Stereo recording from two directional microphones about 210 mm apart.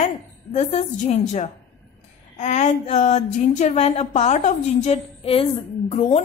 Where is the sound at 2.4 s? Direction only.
35° left (ahead or behind).